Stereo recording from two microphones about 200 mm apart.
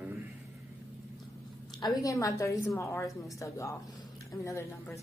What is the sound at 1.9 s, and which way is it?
A woman's voice, 15° left (ahead or behind).